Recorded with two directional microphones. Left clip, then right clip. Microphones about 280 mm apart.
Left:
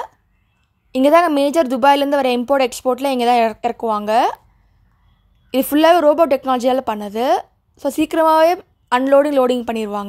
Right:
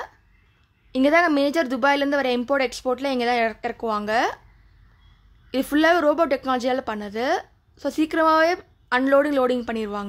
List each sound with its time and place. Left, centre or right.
0.9 s a woman's voice: centre
5.5 s a woman's voice: centre